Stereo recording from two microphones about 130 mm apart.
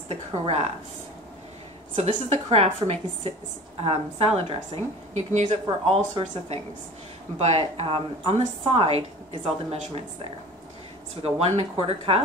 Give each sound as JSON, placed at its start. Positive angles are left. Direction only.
{"t": 0.1, "sound": "a woman's voice", "side_deg": -55}
{"t": 2.0, "sound": "a woman's voice", "side_deg": -40}
{"t": 2.2, "sound": "a woman's voice", "side_deg": -55}
{"t": 5.1, "sound": "a woman's voice", "side_deg": -65}
{"t": 5.5, "sound": "a woman's voice", "side_deg": -45}
{"t": 7.3, "sound": "a woman's voice", "side_deg": -55}
{"t": 11.2, "sound": "a woman's voice", "side_deg": -55}